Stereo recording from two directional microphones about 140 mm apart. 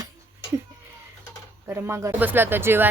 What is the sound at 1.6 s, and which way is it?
A woman's voice, 15° right (ahead or behind).